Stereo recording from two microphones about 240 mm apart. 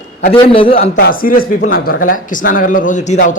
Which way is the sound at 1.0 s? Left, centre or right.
Left.